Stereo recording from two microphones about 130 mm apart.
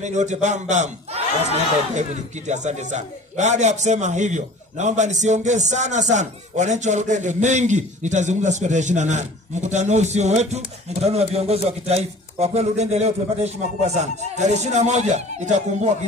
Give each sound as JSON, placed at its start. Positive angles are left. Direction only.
{"t": 0.0, "sound": "a man's voice", "side_deg": -65}